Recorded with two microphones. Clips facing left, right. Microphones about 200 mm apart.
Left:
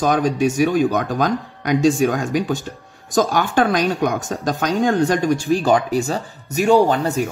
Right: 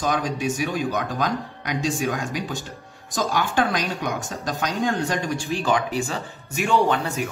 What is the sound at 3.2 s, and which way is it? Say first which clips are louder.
Speech: left 6 dB; 50° left (ahead or behind).